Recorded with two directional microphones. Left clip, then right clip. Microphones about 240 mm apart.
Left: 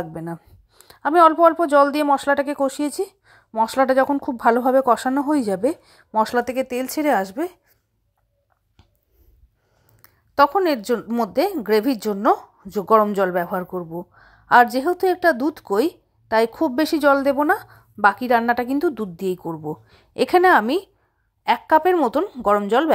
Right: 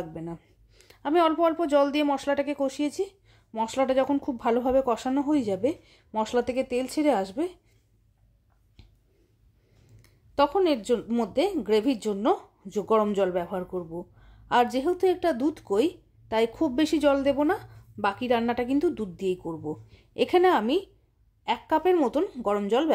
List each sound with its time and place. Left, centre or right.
0.0 s speech: centre
10.0 s speech: centre